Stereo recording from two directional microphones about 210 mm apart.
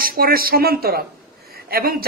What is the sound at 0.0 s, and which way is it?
A woman's voice, 45° right (ahead or behind).